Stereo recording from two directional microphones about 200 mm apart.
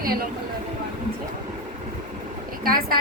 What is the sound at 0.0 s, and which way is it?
Speech, 45° right (ahead or behind).